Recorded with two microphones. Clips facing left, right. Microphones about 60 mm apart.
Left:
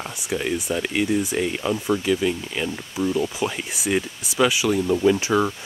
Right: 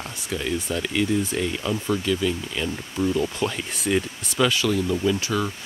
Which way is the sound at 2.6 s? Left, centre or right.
Centre.